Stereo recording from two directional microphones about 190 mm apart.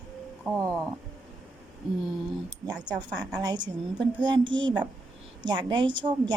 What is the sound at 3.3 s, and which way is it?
A woman's voice, 20° right (ahead or behind).